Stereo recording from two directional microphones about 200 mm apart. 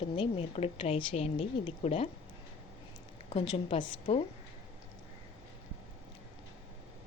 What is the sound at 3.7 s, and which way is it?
Speech, 30° left (ahead or behind).